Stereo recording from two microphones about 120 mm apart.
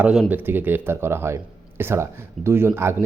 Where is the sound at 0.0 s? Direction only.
10° right (ahead or behind).